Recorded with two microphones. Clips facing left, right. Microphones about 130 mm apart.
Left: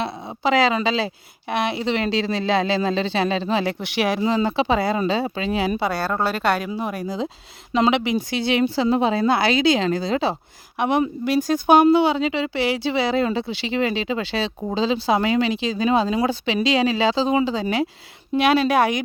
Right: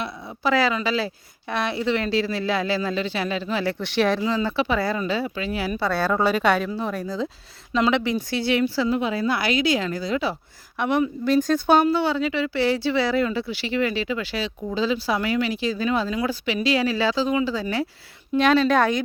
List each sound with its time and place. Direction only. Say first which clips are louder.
0.2 s speech: left 2 dB; 20° left (ahead or behind)
4.2 s speech: left 3 dB; 25° left (ahead or behind)
6.0 s a woman's voice: right 2 dB; 5° left (ahead or behind)